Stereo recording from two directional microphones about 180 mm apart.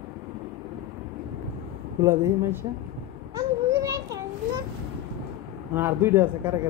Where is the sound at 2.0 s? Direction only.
15° right (ahead or behind).